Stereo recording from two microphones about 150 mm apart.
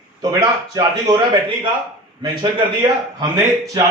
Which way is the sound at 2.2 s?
30° right (ahead or behind).